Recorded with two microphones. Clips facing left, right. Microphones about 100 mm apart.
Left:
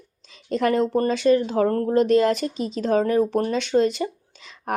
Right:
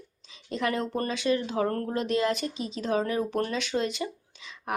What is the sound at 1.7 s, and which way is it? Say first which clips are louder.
Speech: left 8 dB; 30° left (ahead or behind).